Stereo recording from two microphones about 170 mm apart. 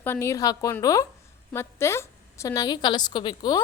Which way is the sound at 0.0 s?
15° left (ahead or behind).